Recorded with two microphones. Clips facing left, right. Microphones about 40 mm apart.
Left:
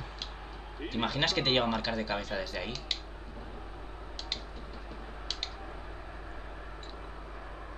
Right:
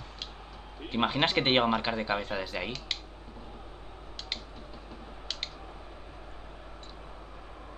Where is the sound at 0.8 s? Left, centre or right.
Right; by 2.8 s centre.